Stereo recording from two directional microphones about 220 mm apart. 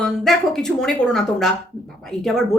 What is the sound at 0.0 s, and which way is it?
A woman's voice, centre (ahead or behind).